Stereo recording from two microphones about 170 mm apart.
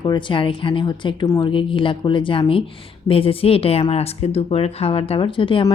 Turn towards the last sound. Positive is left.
turn(degrees=30)  # may be behind; listen again after turning